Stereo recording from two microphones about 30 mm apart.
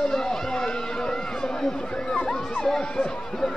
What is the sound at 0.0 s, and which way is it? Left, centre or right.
Run, centre.